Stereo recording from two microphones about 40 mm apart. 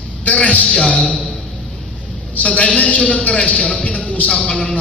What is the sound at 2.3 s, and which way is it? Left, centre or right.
A man's voice, left.